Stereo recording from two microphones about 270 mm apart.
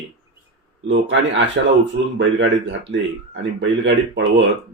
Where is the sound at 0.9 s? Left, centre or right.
Right.